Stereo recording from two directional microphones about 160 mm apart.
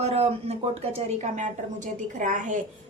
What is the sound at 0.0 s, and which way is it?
A woman's voice, 40° right (ahead or behind).